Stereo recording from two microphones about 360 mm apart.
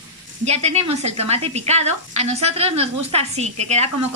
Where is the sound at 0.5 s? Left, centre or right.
Centre.